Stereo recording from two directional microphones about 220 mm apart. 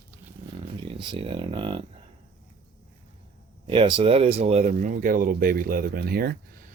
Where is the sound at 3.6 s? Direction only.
25° right (ahead or behind).